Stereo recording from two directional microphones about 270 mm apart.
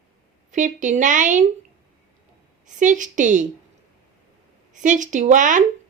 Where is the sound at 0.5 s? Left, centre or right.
Right.